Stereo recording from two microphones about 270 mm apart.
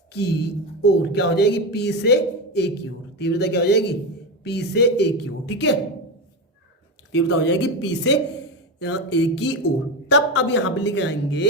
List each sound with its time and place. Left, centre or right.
0.8 s speech: left
7.1 s speech: left